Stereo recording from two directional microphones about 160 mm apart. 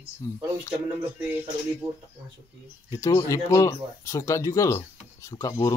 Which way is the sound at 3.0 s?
20° left (ahead or behind).